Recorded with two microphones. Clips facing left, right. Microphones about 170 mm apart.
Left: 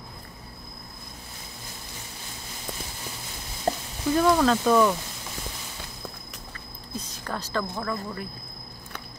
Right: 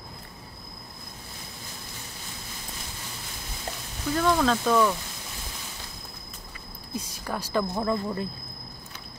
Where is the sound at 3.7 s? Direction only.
50° left (ahead or behind).